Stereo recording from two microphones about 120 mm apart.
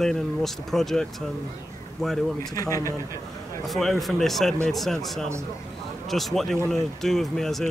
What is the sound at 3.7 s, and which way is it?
Speech, centre (ahead or behind).